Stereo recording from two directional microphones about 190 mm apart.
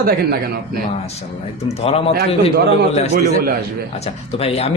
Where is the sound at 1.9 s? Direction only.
30° left (ahead or behind).